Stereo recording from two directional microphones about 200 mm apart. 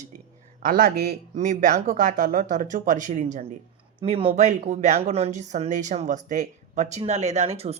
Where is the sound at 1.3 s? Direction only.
40° right (ahead or behind).